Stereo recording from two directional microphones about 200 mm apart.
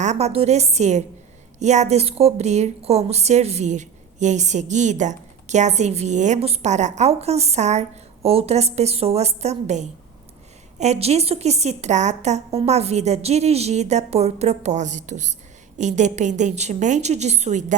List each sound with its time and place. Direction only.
0.0 s a woman's voice: 35° right (ahead or behind)